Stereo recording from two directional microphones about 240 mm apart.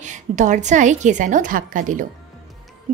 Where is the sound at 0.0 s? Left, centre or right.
Right.